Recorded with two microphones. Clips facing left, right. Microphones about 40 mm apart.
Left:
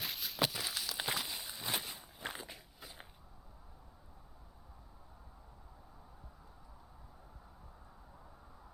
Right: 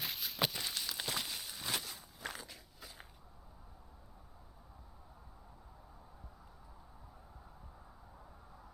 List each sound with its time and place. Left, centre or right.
0.0 s a sound: centre
1.1 s walk: centre
1.8 s walk: left